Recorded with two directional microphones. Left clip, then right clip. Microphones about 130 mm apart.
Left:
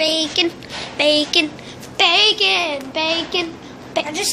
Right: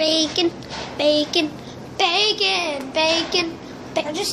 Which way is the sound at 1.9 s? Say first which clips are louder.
Left 5 dB; 30° left (ahead or behind).